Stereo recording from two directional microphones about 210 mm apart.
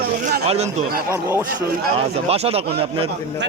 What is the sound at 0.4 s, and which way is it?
Speech, 30° right (ahead or behind).